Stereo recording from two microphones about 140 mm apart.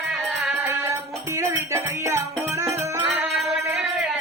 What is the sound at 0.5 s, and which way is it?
Music, 20° right (ahead or behind).